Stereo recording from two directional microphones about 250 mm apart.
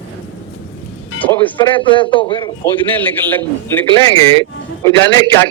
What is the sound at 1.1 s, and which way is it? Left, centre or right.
Speech, centre.